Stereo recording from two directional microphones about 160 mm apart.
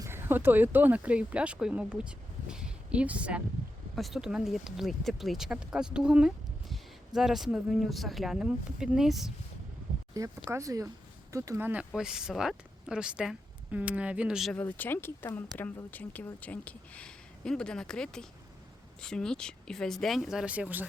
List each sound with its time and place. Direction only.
0.0 s speech: 15° right (ahead or behind)
10.2 s speech: 20° right (ahead or behind)
14.5 s speech: 10° left (ahead or behind); by 20.8 s 10° right (ahead or behind)